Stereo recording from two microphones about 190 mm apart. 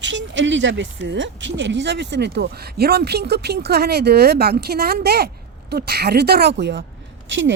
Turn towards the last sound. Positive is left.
turn(degrees=-80)